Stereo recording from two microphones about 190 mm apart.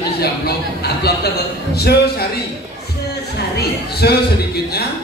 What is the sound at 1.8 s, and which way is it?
Speech, 55° left (ahead or behind).